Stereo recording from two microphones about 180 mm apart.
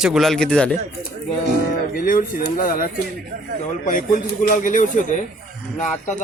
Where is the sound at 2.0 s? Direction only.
50° left (ahead or behind).